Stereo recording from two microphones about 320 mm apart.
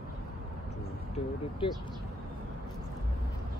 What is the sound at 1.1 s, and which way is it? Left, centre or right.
Speech, centre.